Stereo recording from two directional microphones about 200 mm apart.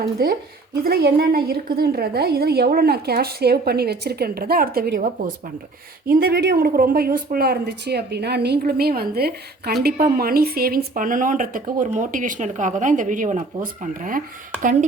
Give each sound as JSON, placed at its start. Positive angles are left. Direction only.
{"t": 0.0, "sound": "speech", "side_deg": -50}
{"t": 6.1, "sound": "speech", "side_deg": -50}